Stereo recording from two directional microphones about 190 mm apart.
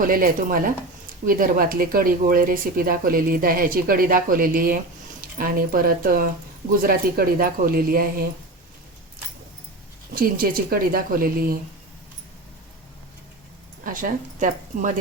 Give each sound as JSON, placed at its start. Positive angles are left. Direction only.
{"t": 0.0, "sound": "speech", "side_deg": -45}
{"t": 10.2, "sound": "speech", "side_deg": -50}
{"t": 13.8, "sound": "speech", "side_deg": -45}